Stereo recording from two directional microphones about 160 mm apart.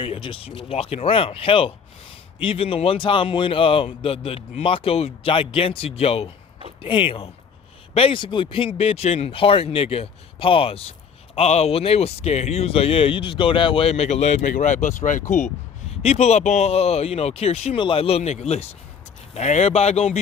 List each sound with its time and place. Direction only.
0.0 s speech: 35° left (ahead or behind)